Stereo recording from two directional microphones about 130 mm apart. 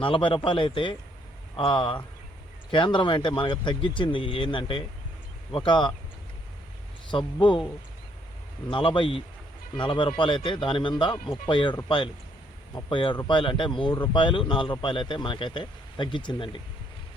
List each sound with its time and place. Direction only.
0.0 s speech: 40° left (ahead or behind)
7.1 s speech: 40° left (ahead or behind)
8.7 s speech: 40° left (ahead or behind)